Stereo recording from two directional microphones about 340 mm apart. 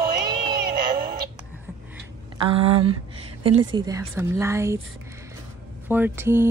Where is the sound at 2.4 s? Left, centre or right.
Centre.